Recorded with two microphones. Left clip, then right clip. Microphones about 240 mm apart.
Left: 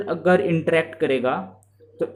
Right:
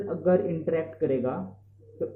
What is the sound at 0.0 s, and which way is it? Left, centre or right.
Speech, left.